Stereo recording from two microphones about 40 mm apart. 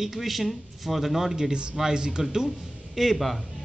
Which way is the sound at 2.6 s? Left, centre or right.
Centre.